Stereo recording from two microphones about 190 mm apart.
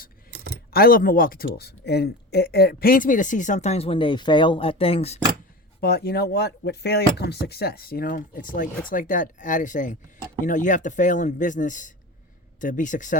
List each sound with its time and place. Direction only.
0.7 s speech: 50° left (ahead or behind); by 5.2 s 30° left (ahead or behind)
5.8 s speech: 55° left (ahead or behind)